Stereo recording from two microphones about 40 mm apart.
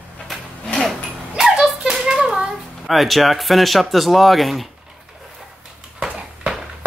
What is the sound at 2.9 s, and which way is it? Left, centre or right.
Speech, centre.